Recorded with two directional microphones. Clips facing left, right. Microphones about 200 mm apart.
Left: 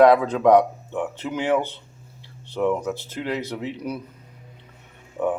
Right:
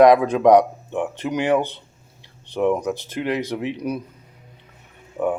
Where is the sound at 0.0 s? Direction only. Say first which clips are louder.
Right 2 dB; 15° right (ahead or behind).